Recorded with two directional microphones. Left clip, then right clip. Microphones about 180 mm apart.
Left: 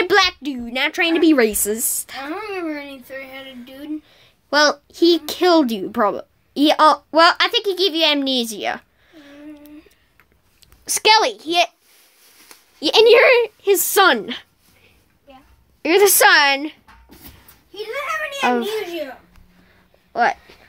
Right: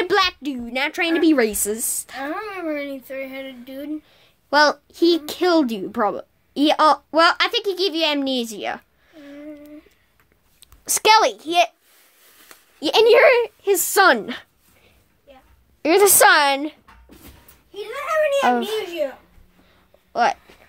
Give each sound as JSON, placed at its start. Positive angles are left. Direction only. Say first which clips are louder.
{"t": 0.0, "sound": "a child's voice", "louder": "left 3 dB", "side_deg": 5}
{"t": 2.2, "sound": "speech", "louder": "even", "side_deg": -40}
{"t": 3.6, "sound": "a sound", "louder": "right 3 dB", "side_deg": -45}
{"t": 4.1, "sound": "a child's voice", "louder": "even", "side_deg": 0}
{"t": 10.6, "sound": "a woman's voice", "louder": "left 2 dB", "side_deg": -15}
{"t": 15.8, "sound": "a woman's voice", "louder": "left 1 dB", "side_deg": -15}
{"t": 18.4, "sound": "a woman's voice", "louder": "even", "side_deg": -10}
{"t": 20.1, "sound": "speech", "louder": "left 1 dB", "side_deg": -5}